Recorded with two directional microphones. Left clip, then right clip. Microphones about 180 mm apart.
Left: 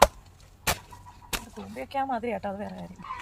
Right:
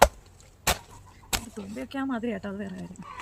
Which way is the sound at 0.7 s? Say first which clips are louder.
Right 2 dB; 25° right (ahead or behind).